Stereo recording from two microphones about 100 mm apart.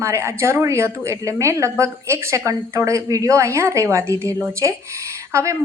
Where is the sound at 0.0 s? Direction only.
25° right (ahead or behind).